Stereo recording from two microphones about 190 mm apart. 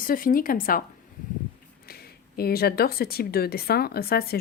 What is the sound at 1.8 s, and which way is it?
Speech, 55° left (ahead or behind).